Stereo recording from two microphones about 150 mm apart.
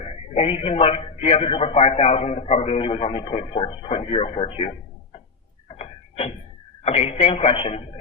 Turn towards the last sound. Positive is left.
turn(degrees=40)  # may be behind; listen again after turning